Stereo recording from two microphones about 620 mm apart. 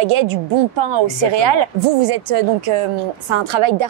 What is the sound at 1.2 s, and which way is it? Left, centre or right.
A woman's voice, right.